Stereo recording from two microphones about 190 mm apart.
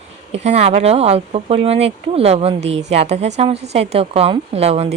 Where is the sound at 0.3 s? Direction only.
35° right (ahead or behind).